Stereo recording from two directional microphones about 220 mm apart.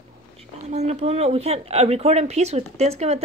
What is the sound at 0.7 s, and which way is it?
Speech, 30° right (ahead or behind).